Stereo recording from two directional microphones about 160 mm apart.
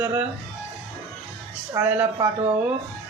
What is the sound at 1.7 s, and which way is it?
Speech, 15° right (ahead or behind).